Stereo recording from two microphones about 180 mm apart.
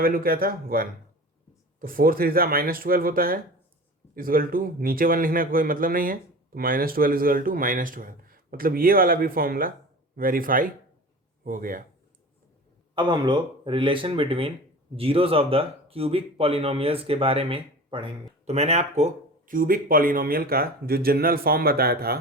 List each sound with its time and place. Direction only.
0.0 s a man's voice: 55° right (ahead or behind)
12.9 s speech: 25° right (ahead or behind); by 22.2 s 60° right (ahead or behind)